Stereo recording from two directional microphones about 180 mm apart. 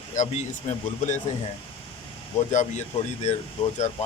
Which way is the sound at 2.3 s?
40° left (ahead or behind).